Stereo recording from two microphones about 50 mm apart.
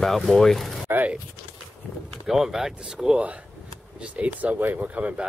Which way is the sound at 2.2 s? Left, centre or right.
Centre.